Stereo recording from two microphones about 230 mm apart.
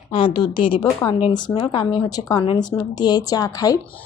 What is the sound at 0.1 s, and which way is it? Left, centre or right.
A woman's voice, left.